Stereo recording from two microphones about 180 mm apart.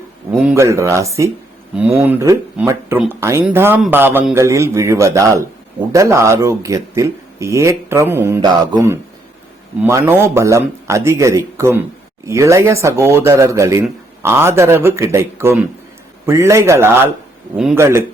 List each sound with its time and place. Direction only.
0.3 s speech: 10° right (ahead or behind)